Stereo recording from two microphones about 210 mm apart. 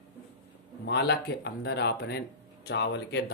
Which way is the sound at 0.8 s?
50° left (ahead or behind).